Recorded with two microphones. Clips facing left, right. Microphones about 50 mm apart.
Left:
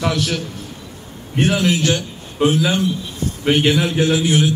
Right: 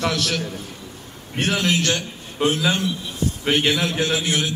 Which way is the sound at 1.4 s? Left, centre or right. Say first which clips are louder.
Left 4 dB; centre.